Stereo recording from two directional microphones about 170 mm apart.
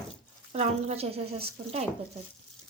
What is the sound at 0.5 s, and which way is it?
Speech, 40° right (ahead or behind).